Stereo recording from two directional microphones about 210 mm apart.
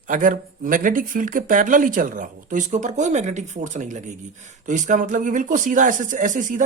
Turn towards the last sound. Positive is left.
turn(degrees=-40)  # may be behind; listen again after turning